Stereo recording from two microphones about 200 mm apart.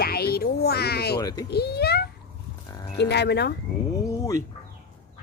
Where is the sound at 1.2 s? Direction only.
20° left (ahead or behind).